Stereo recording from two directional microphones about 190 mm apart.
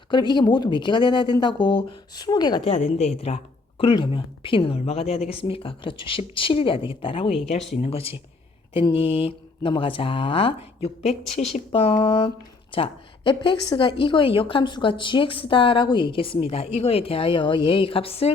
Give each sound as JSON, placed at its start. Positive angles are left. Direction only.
{"t": 0.1, "sound": "a woman's voice", "side_deg": 25}
{"t": 2.6, "sound": "a woman's voice", "side_deg": 35}
{"t": 11.7, "sound": "a woman's voice", "side_deg": 30}